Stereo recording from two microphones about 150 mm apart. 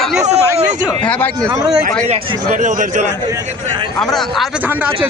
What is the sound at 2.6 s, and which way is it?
Speech, 55° right (ahead or behind).